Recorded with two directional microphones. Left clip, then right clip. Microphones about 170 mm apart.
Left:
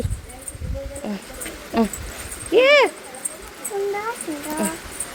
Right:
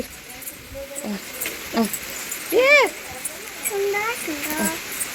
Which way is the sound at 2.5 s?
35° left (ahead or behind).